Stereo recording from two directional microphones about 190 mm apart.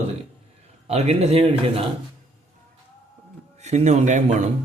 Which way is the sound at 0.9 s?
35° right (ahead or behind).